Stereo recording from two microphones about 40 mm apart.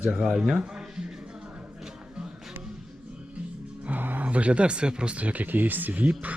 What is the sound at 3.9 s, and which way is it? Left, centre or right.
Music, right.